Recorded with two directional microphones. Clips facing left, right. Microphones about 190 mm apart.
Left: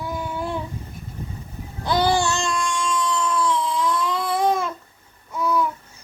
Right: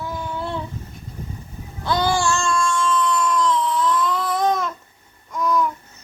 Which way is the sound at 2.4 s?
15° left (ahead or behind).